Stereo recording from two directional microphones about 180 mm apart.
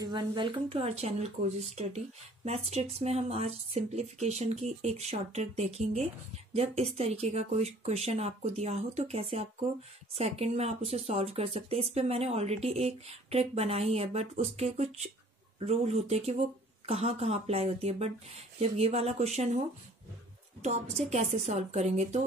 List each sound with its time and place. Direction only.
0.0 s speech: 25° right (ahead or behind)
20.6 s speech: 40° right (ahead or behind)